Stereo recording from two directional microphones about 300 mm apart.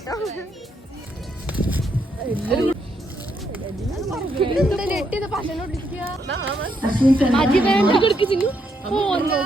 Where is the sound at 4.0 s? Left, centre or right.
Centre.